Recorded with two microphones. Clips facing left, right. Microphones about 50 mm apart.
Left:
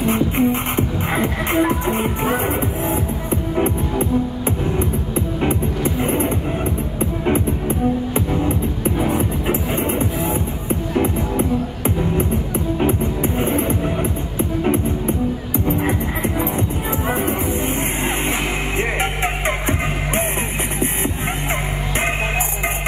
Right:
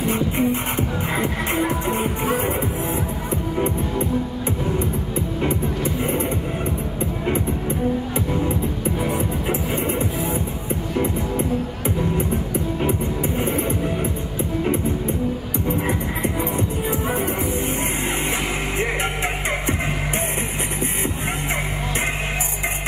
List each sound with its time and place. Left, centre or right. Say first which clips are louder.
0.1 s music: left 3 dB; left
8.8 s music: left 5 dB; left
18.8 s music: left 3 dB; left